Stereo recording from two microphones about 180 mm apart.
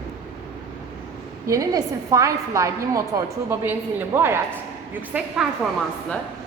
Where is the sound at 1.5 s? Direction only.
20° right (ahead or behind).